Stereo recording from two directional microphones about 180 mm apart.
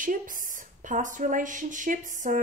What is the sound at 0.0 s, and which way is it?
A woman's voice, 50° right (ahead or behind).